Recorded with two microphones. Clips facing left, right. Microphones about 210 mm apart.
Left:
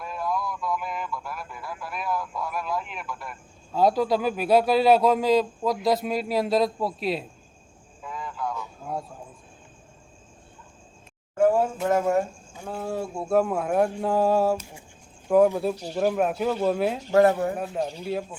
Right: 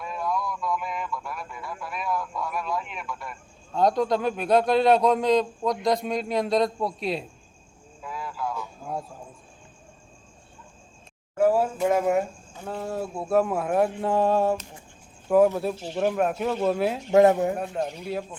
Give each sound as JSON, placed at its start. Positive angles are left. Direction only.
{"t": 0.0, "sound": "speech", "side_deg": 0}
{"t": 8.0, "sound": "a sound", "side_deg": -5}
{"t": 11.3, "sound": "speech", "side_deg": -5}
{"t": 12.5, "sound": "speech", "side_deg": 5}
{"t": 15.3, "sound": "speech", "side_deg": -5}
{"t": 17.1, "sound": "speech", "side_deg": -20}
{"t": 18.0, "sound": "speech", "side_deg": 0}